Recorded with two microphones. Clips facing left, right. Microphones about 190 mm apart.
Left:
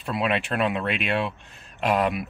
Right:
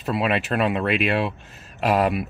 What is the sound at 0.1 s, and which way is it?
Speech, 5° right (ahead or behind).